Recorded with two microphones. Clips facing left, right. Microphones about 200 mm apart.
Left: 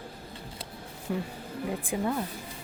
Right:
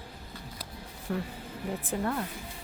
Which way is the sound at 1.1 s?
10° left (ahead or behind).